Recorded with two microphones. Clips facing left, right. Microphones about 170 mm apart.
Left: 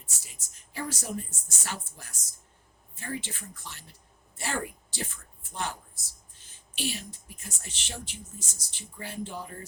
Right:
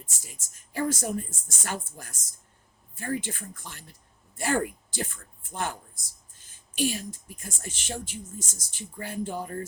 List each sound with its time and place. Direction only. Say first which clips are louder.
0.0 s speech: right 5 dB; 50° right (ahead or behind)